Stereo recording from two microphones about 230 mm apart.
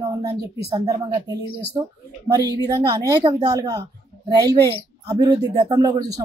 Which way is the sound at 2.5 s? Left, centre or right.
Centre.